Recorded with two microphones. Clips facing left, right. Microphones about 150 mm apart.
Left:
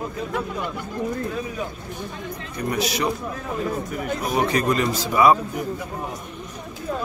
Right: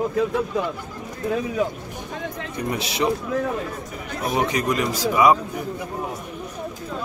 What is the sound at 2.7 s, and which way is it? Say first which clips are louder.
Speech: left 1 dB; 25° right (ahead or behind).